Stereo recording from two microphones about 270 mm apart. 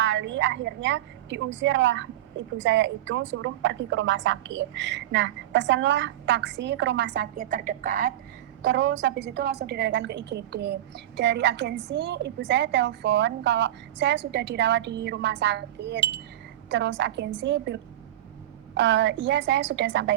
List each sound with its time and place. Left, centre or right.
0.0 s a woman's voice: right
8.6 s a woman's voice: right